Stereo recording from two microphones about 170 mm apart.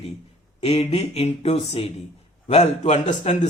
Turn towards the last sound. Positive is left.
turn(degrees=45)  # may be behind; listen again after turning